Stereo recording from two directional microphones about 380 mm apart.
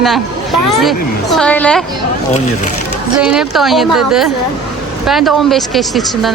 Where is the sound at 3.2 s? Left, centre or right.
Centre.